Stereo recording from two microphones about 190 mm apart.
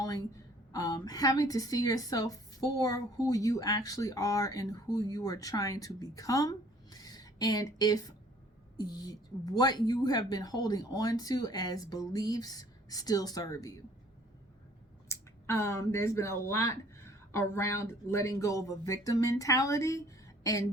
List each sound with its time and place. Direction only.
0.0 s a sound: 20° left (ahead or behind)
0.7 s a woman's voice: 20° left (ahead or behind)
15.1 s speech: 15° left (ahead or behind)